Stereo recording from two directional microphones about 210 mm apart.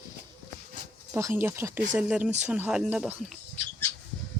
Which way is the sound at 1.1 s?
10° right (ahead or behind).